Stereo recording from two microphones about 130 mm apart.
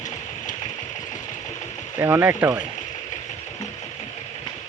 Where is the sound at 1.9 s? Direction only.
15° right (ahead or behind).